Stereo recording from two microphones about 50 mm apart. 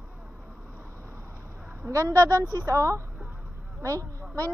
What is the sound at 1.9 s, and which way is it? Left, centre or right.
Speech, right.